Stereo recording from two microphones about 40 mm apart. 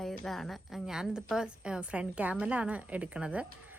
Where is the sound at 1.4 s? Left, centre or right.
Right.